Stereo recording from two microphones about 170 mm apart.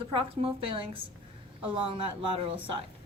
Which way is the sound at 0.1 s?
35° right (ahead or behind).